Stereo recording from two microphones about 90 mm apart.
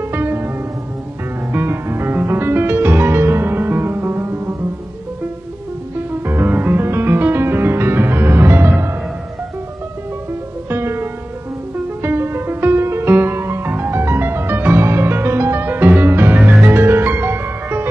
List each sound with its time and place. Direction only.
0.0 s music: 25° right (ahead or behind)
1.5 s music: 25° right (ahead or behind)
5.9 s music: 25° right (ahead or behind)
10.7 s music: 30° right (ahead or behind)